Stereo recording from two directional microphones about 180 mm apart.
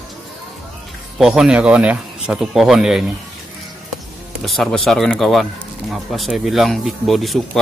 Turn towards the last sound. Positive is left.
turn(degrees=0)  # may be behind; listen again after turning